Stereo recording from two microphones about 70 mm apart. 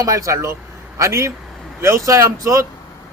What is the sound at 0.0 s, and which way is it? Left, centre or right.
A man's voice, right.